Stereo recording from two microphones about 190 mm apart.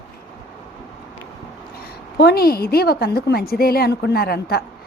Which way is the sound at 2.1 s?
55° left (ahead or behind).